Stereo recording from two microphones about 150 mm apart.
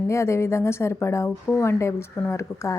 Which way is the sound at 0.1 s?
20° left (ahead or behind).